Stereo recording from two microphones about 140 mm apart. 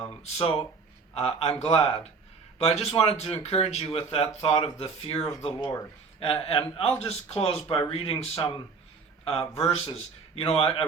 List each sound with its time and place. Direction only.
0.1 s speech: 50° left (ahead or behind)
5.5 s speech: 30° left (ahead or behind)
6.4 s a man's voice: 40° left (ahead or behind)